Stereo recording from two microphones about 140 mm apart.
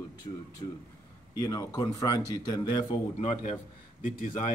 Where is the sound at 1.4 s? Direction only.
25° left (ahead or behind).